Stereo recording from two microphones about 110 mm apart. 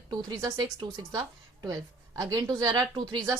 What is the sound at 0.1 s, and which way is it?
A woman's voice, 35° right (ahead or behind).